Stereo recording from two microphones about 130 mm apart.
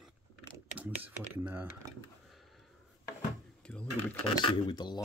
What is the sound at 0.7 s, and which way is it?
Speech, 15° right (ahead or behind).